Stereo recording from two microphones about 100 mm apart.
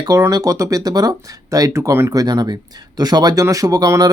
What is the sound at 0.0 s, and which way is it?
Speech, 40° right (ahead or behind).